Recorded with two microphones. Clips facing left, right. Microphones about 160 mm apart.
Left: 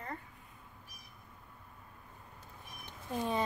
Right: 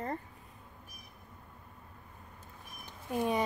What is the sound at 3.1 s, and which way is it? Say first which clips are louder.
Speech: right 4 dB; 15° right (ahead or behind).